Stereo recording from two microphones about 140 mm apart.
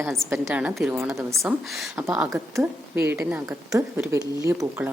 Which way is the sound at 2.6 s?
15° right (ahead or behind).